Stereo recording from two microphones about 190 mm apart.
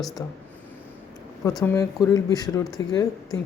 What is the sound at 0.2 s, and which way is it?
Speech, 15° left (ahead or behind).